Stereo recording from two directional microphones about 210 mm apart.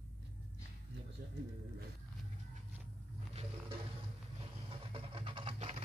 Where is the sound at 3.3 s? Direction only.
30° right (ahead or behind).